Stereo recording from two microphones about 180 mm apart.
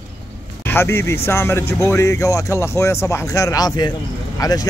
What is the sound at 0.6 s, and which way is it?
A man's voice, 15° left (ahead or behind).